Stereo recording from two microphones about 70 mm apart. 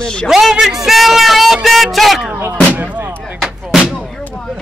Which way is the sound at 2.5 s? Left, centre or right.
Centre.